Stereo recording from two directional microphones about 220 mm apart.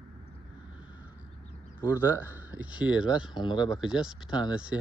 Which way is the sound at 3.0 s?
20° left (ahead or behind).